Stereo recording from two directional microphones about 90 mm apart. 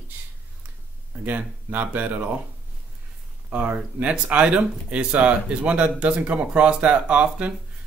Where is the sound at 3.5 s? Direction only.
15° right (ahead or behind).